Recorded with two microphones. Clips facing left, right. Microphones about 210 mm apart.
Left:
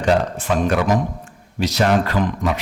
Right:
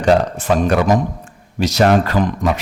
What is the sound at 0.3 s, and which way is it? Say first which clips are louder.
A man's voice: right 3 dB; 40° right (ahead or behind).